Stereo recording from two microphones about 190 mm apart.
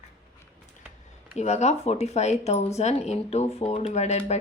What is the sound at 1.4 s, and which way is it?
Speech, 35° left (ahead or behind).